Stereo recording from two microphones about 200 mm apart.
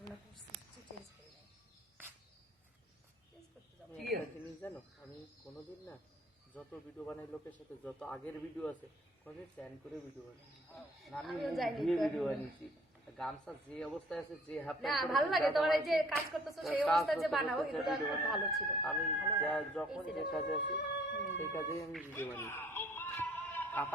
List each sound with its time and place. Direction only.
7.0 s a woman's voice: 5° left (ahead or behind)
11.0 s a woman's voice: centre (ahead or behind)
20.7 s music: 60° left (ahead or behind)
21.3 s speech: 15° left (ahead or behind)
22.1 s a sound: 10° left (ahead or behind)